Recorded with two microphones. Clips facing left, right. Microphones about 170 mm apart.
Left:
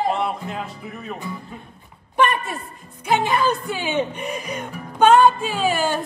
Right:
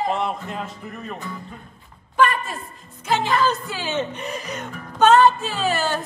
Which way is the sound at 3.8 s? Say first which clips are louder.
Left 2 dB; 15° left (ahead or behind).